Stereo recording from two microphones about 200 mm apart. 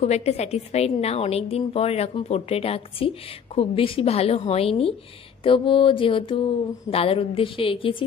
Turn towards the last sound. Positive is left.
turn(degrees=25)  # may be behind; listen again after turning